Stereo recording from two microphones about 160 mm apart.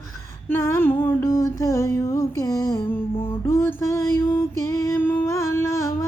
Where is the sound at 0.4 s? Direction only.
15° left (ahead or behind).